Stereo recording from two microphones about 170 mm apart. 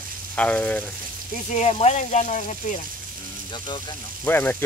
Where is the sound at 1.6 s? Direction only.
40° left (ahead or behind).